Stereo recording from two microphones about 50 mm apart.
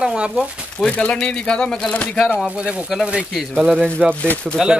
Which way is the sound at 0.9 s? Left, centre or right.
Left.